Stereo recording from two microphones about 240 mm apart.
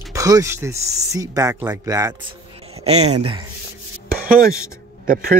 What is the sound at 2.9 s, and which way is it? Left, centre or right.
Speech, right.